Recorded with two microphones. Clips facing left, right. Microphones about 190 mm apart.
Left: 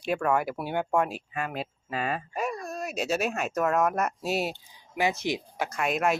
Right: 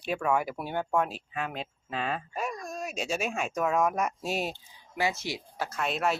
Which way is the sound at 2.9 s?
5° left (ahead or behind).